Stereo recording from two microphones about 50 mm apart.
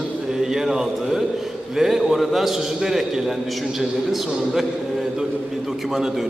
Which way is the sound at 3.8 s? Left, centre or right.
Centre.